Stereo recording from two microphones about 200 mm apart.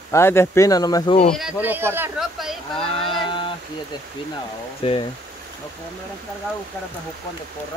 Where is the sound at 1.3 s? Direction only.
5° right (ahead or behind).